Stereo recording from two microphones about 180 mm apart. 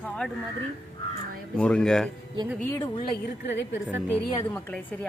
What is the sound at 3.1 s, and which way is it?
Speech, 70° left (ahead or behind).